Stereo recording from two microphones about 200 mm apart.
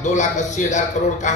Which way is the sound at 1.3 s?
40° left (ahead or behind).